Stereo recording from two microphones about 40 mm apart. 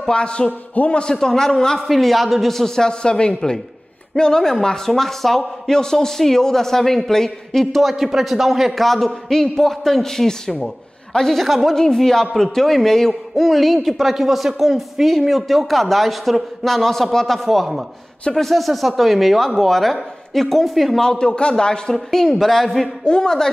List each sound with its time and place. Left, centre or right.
0.1 s a man's voice: left
1.1 s a man's voice: centre
1.9 s a man's voice: centre; by 3.3 s left
3.3 s a man's voice: centre
7.9 s speech: centre
11.7 s a man's voice: centre
21.0 s a man's voice: centre
21.9 s a man's voice: centre
23.0 s a man's voice: centre